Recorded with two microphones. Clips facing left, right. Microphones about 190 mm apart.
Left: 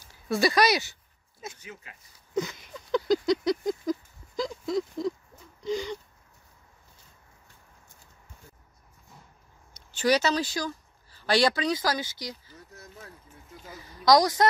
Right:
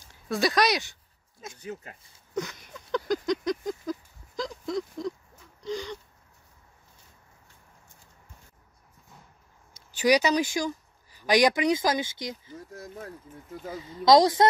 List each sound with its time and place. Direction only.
0.1 s speech: centre (ahead or behind)
1.6 s speech: 40° right (ahead or behind)
2.3 s a sound: 5° left (ahead or behind)
9.9 s speech: 15° right (ahead or behind)
12.5 s speech: 50° right (ahead or behind)
13.7 s speech: 25° right (ahead or behind)